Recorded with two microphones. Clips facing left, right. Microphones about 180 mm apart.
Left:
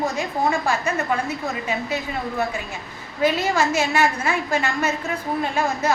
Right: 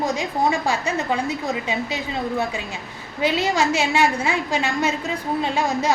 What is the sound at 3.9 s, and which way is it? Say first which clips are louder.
A woman's voice: right 1 dB; 15° right (ahead or behind).